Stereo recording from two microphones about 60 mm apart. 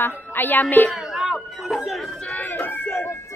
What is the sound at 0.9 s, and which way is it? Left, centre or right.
Chatter, centre.